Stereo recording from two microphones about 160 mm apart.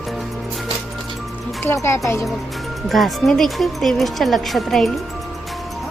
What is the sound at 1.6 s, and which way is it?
Speech, 15° left (ahead or behind).